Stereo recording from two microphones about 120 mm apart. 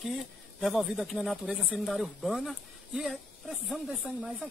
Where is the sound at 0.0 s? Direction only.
Centre (ahead or behind).